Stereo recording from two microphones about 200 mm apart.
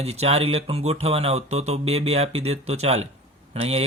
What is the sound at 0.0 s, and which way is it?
Speech, 30° right (ahead or behind).